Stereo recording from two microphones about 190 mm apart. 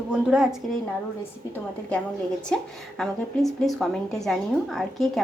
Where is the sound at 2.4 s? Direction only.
5° left (ahead or behind).